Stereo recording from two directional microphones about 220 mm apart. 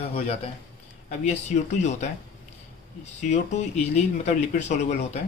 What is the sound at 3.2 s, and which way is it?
Speech, 30° left (ahead or behind).